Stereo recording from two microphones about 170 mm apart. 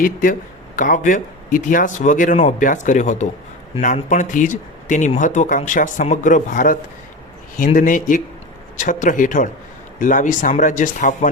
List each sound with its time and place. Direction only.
0.0 s speech: 55° left (ahead or behind)